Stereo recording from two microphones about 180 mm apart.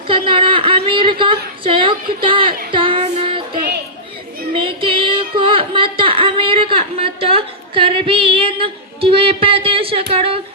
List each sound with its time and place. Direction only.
0.1 s speech: 30° right (ahead or behind)
4.5 s music: 30° right (ahead or behind)
10.1 s a sound: 30° right (ahead or behind)